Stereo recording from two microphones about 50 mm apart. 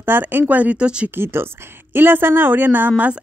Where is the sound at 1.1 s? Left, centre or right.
Right.